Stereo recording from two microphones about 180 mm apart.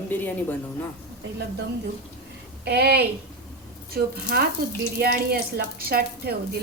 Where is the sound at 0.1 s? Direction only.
10° left (ahead or behind).